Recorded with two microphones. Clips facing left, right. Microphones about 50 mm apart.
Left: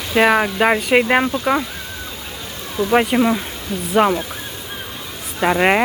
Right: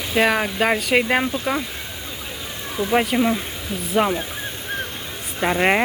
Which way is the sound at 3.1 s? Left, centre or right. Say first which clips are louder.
Left 3 dB; left.